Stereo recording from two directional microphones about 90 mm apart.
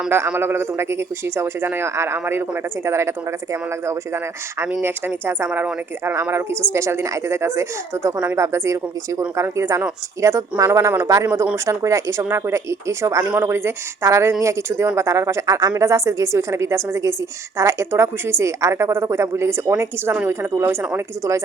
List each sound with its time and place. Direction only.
0.3 s a woman's voice: 25° right (ahead or behind)
6.7 s a woman's voice: 30° right (ahead or behind)
20.1 s a woman's voice: 20° right (ahead or behind)